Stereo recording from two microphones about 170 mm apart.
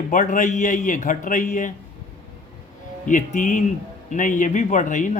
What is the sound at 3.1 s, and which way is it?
A man's voice, 50° left (ahead or behind).